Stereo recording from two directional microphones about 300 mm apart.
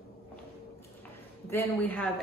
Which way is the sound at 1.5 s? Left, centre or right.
Centre.